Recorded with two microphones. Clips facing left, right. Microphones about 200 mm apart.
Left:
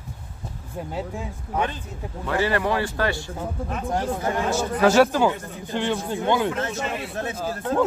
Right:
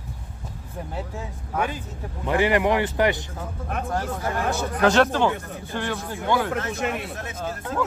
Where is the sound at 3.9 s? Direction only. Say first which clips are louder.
Left 4 dB; 20° left (ahead or behind).